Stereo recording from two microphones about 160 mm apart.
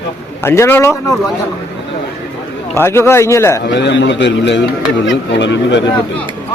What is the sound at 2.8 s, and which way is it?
Speech, 15° left (ahead or behind).